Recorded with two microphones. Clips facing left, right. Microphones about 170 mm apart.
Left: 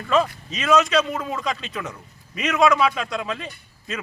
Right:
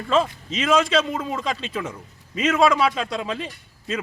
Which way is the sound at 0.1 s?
25° right (ahead or behind).